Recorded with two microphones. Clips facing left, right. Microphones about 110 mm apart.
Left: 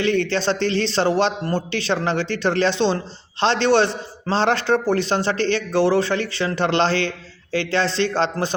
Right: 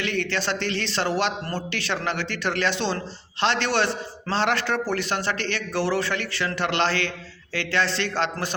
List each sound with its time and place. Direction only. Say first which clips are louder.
0.0 s a man's voice: left 7 dB; 30° left (ahead or behind)